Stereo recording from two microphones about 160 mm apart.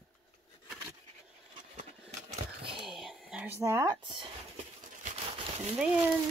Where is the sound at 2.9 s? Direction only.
Centre (ahead or behind).